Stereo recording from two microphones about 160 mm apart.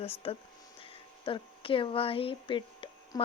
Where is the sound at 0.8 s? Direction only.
35° left (ahead or behind).